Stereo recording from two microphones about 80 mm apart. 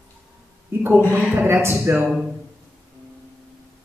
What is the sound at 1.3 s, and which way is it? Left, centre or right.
Speech, right.